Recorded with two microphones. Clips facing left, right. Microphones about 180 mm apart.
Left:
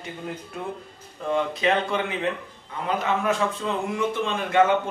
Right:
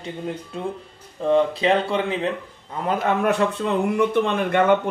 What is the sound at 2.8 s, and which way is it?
Speech, 55° right (ahead or behind).